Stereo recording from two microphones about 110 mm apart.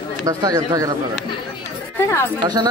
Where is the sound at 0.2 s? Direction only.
35° right (ahead or behind).